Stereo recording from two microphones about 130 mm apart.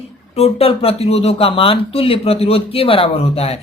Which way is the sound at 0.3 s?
50° left (ahead or behind).